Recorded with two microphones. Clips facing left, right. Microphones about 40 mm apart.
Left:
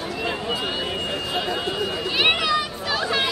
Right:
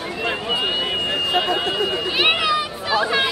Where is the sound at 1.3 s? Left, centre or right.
Right.